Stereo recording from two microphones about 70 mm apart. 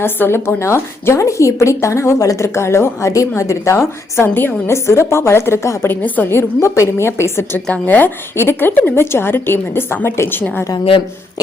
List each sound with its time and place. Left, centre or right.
0.0 s a woman's voice: left
7.7 s a woman's voice: left